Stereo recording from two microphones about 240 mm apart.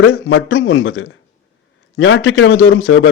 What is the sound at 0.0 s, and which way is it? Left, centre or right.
A man's voice, left.